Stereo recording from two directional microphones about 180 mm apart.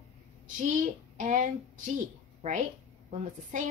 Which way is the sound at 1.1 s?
45° right (ahead or behind).